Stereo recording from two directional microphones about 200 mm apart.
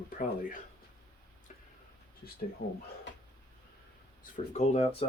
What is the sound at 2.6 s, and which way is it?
Speech, 45° left (ahead or behind).